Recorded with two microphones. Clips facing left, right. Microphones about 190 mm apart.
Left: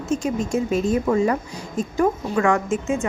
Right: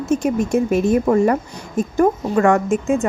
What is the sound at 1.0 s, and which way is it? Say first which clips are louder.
A woman's voice: right 4 dB; 45° right (ahead or behind).